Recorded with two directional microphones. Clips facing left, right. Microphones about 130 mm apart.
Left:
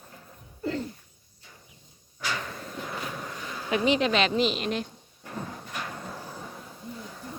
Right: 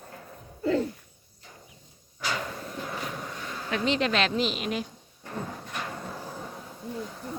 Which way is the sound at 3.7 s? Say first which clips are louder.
Left 3 dB; 5° left (ahead or behind).